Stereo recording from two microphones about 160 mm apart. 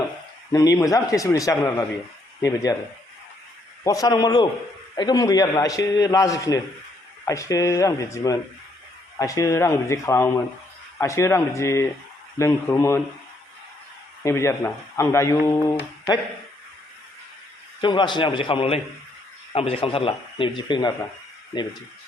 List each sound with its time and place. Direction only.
0.5 s a man's voice: 20° left (ahead or behind)
3.8 s a man's voice: 25° left (ahead or behind)
14.3 s speech: 15° left (ahead or behind)
17.7 s a man's voice: 30° left (ahead or behind)